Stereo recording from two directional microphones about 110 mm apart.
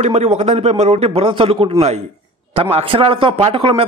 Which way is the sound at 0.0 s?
80° right.